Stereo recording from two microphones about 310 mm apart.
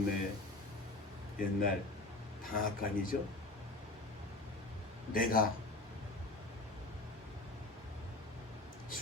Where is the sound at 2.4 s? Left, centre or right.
Left.